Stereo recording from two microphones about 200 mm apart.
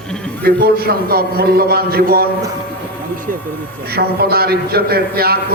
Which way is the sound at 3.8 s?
50° right (ahead or behind).